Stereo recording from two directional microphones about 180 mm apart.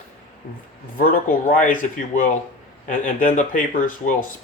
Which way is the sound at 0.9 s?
50° left (ahead or behind).